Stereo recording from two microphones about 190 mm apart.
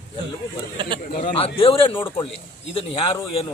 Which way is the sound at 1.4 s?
30° left (ahead or behind).